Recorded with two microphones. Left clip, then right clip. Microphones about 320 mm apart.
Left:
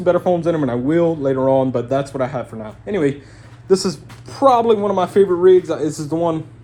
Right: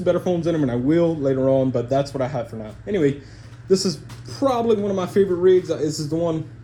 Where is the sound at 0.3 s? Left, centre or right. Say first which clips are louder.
Left 4 dB; left.